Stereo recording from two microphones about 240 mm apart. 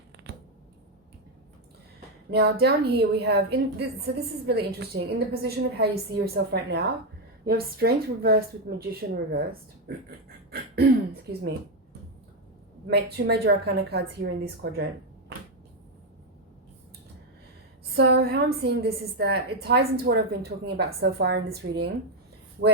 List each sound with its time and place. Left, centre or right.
2.3 s a woman's voice: right
10.5 s throat clearing: right
12.9 s a woman's voice: right
17.9 s a woman's voice: right